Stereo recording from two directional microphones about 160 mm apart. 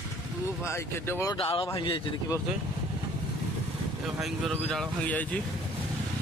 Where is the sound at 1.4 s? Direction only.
35° left (ahead or behind).